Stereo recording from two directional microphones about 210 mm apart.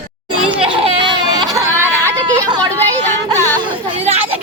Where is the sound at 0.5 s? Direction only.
25° right (ahead or behind).